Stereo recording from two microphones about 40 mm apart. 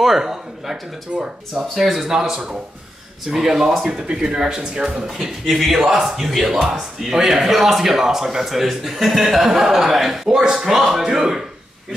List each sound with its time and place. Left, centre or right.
0.0 s speech: centre
1.6 s speech: centre
5.5 s speech: centre